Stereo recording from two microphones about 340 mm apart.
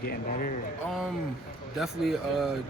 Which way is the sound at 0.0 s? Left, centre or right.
Left.